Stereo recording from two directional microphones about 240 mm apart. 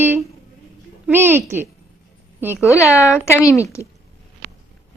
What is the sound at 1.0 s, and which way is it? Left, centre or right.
Speech, centre.